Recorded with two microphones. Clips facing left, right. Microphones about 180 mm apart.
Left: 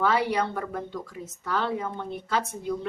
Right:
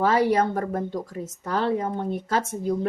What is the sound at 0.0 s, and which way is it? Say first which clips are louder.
Speech: right 4 dB; 45° right (ahead or behind).